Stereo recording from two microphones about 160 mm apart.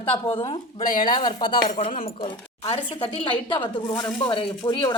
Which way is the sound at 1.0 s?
30° left (ahead or behind).